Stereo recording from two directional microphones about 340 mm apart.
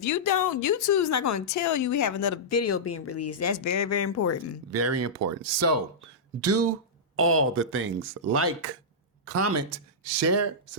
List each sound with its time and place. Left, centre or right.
0.0 s speech: left
4.7 s speech: right